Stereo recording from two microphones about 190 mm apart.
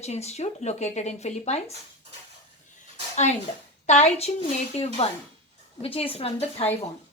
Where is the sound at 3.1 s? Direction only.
35° left (ahead or behind).